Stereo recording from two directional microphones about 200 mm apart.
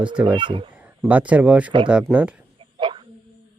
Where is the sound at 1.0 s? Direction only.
5° right (ahead or behind).